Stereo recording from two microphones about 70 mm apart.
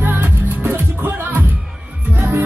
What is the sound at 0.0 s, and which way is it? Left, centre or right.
Music, right.